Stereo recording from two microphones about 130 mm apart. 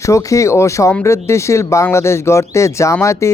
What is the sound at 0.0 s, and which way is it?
Speech, 25° left (ahead or behind).